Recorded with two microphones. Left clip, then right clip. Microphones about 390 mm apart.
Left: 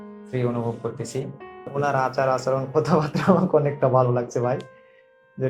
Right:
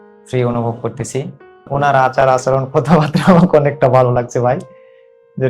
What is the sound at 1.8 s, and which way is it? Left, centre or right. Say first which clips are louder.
Speech: right 10 dB; right.